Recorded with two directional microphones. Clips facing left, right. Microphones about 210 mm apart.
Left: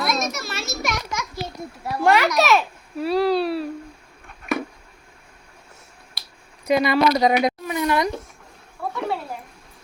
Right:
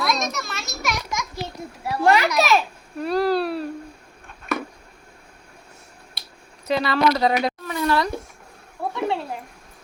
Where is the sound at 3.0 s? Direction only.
Centre (ahead or behind).